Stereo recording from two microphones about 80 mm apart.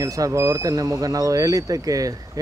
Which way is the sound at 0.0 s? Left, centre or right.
Right.